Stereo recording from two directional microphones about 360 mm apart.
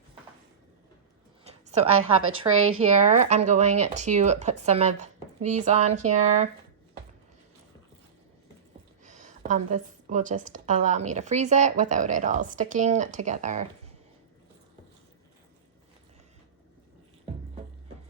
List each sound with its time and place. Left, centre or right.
1.5 s a sound: centre
2.5 s speech: right
3.0 s a woman's voice: centre
9.0 s a woman's voice: centre